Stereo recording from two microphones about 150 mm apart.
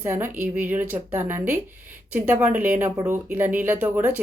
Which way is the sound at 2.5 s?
60° right (ahead or behind).